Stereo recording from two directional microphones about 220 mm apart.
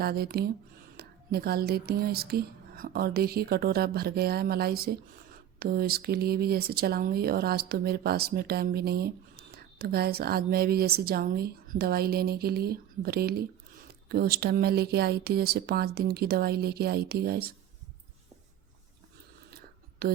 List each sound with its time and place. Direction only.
0.0 s speech: 45° right (ahead or behind)
20.0 s speech: 45° right (ahead or behind)